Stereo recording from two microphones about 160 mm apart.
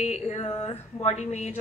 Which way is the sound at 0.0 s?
45° left (ahead or behind).